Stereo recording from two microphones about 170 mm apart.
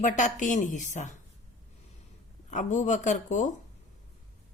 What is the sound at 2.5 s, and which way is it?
A woman's voice, 45° left (ahead or behind).